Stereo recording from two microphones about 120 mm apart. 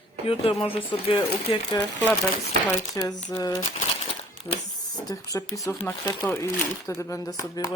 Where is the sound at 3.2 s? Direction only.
35° left (ahead or behind).